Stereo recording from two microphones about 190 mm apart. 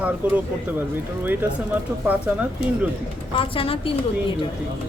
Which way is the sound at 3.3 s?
30° left (ahead or behind).